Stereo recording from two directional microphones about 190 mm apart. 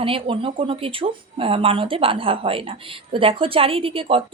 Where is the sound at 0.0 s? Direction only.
30° right (ahead or behind).